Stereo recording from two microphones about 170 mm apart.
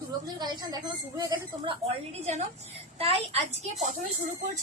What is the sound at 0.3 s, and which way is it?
A woman's voice, 25° right (ahead or behind).